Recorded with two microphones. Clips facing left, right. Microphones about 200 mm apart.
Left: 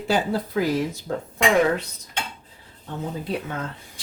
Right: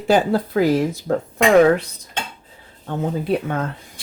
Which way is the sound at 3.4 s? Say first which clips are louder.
Right 7 dB; 55° right (ahead or behind).